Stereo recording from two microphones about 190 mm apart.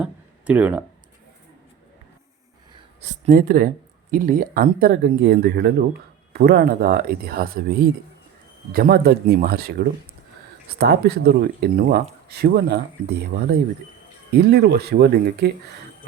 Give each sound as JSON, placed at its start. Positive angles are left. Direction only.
{"t": 0.0, "sound": "a sound", "side_deg": -5}
{"t": 3.0, "sound": "speech", "side_deg": -45}
{"t": 8.7, "sound": "speech", "side_deg": -55}